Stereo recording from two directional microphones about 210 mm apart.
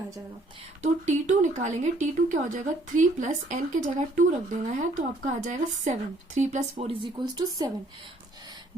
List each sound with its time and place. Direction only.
0.8 s speech: 35° right (ahead or behind)
7.0 s speech: 20° right (ahead or behind)